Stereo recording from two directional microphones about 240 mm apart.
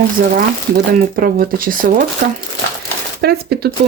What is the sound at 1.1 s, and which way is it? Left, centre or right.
Speech, right.